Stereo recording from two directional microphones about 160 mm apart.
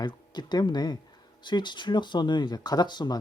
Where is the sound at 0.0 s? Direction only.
25° left (ahead or behind).